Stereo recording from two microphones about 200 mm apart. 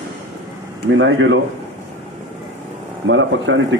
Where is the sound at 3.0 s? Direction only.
70° right (ahead or behind).